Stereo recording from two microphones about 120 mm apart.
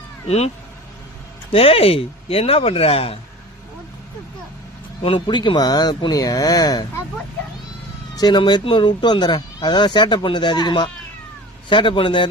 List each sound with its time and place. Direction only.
0.3 s speech: 60° left (ahead or behind)
1.5 s speech: 55° left (ahead or behind)
5.0 s speech: 40° left (ahead or behind)
8.1 s speech: 35° left (ahead or behind)